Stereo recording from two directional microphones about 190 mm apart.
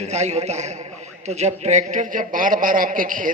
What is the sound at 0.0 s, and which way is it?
A man's voice, 35° right (ahead or behind).